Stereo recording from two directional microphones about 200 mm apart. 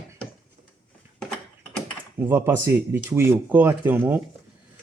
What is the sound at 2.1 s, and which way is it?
Speech, 10° right (ahead or behind).